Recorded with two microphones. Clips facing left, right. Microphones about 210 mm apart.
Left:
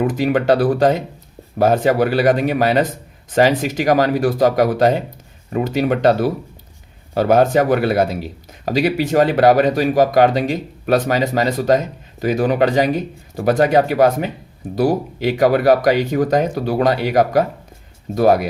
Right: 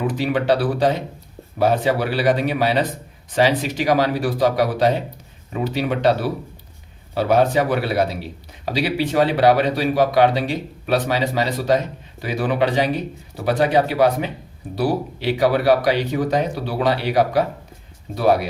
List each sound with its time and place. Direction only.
0.1 s speech: 45° left (ahead or behind)